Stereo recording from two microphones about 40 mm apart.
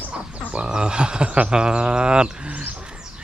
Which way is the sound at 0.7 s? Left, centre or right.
Right.